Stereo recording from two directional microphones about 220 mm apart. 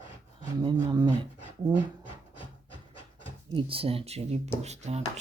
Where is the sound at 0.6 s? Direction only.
20° right (ahead or behind).